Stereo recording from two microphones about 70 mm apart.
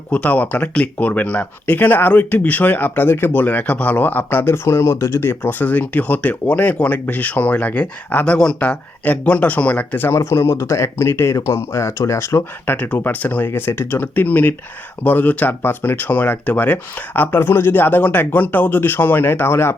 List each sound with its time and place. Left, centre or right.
0.1 s speech: left
10.1 s speech: left
12.7 s speech: left